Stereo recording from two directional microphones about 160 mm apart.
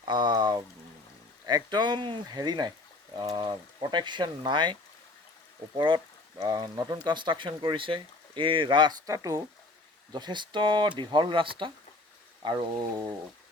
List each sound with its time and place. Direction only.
0.1 s speech: 30° right (ahead or behind)